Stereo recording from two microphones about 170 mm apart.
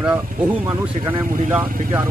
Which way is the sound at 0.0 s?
10° right (ahead or behind).